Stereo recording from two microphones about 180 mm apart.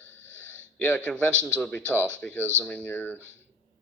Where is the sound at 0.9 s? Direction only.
5° left (ahead or behind).